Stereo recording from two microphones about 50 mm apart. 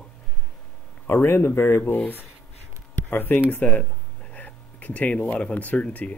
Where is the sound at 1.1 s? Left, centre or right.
Left.